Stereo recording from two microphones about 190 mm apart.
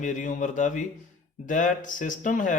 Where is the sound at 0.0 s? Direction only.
40° left (ahead or behind).